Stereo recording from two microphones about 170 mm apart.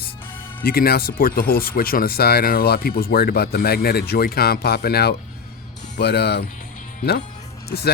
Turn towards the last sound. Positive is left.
turn(degrees=70)  # may be behind; listen again after turning